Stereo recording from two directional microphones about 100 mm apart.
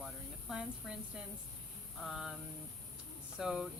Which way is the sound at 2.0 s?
5° right (ahead or behind).